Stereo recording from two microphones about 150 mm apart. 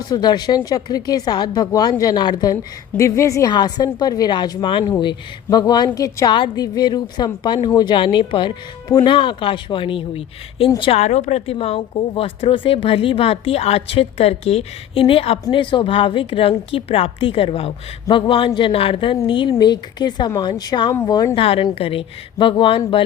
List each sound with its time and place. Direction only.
0.1 s a woman's voice: 30° left (ahead or behind)
21.4 s speech: 40° left (ahead or behind)